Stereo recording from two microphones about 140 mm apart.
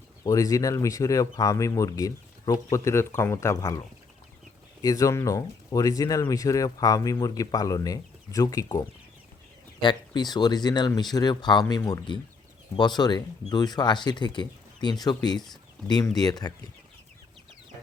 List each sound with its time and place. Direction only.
0.3 s speech: 25° left (ahead or behind)
9.8 s speech: 30° left (ahead or behind)